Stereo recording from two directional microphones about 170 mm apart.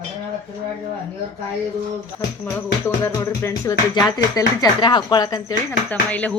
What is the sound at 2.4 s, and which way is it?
Music, 15° left (ahead or behind).